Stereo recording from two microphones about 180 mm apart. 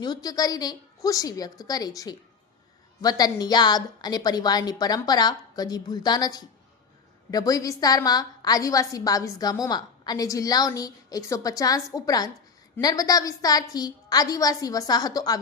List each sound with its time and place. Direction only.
0.0 s a woman's voice: 20° left (ahead or behind)